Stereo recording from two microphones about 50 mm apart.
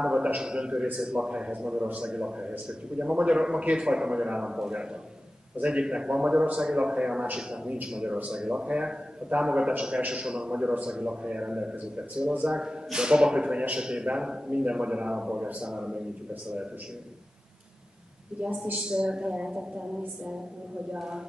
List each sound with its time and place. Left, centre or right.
0.0 s a man's voice: centre
18.9 s a man's voice: centre